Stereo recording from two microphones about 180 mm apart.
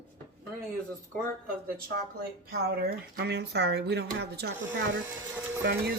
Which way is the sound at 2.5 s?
60° right (ahead or behind).